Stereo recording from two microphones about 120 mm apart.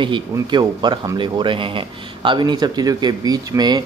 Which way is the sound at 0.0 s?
40° right (ahead or behind).